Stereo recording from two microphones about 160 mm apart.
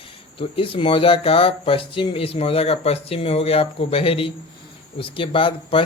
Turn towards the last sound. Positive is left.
turn(degrees=35)  # may be behind; listen again after turning